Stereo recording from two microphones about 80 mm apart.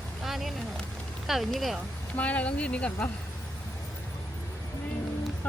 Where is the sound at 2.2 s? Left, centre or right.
Centre.